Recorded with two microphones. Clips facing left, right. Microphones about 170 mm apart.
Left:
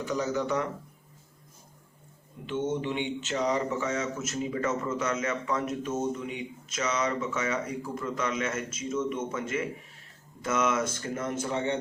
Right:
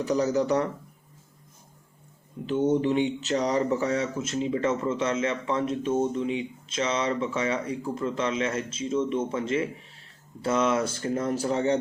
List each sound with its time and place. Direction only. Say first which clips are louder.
0.0 s speech: right 5 dB; 35° right (ahead or behind)
2.5 s speech: right 7 dB; 40° right (ahead or behind)